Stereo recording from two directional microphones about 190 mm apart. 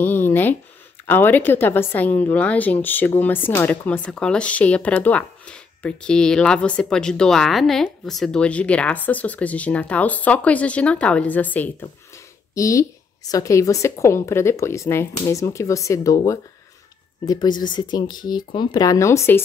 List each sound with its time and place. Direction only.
0.0 s a woman's voice: 10° left (ahead or behind)